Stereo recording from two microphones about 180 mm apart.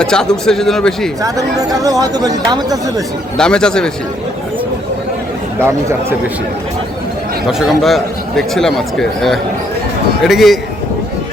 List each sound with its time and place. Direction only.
0.0 s a man's voice: 5° left (ahead or behind)
1.2 s speech: 20° right (ahead or behind)
3.3 s a man's voice: 5° left (ahead or behind)
5.5 s speech: 15° right (ahead or behind)
7.4 s a man's voice: centre (ahead or behind)